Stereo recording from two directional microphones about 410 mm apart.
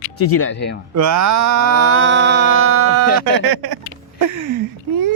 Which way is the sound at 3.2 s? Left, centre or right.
Right.